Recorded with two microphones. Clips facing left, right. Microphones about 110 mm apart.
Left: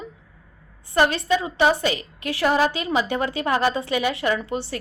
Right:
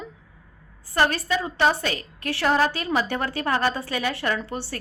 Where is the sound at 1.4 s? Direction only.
10° left (ahead or behind).